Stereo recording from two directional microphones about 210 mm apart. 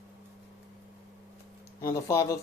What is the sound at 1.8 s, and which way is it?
Speech, 15° left (ahead or behind).